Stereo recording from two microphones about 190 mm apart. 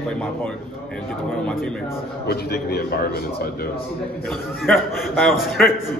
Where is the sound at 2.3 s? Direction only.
55° left (ahead or behind).